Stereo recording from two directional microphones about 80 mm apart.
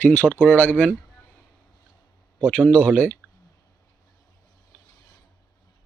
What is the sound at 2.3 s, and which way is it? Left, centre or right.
Speech, centre.